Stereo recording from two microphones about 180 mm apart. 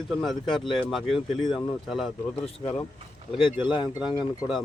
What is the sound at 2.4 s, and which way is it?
Speech, 30° left (ahead or behind).